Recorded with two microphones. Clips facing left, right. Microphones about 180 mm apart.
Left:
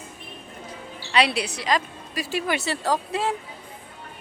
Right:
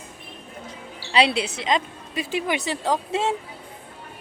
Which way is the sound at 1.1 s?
25° right (ahead or behind).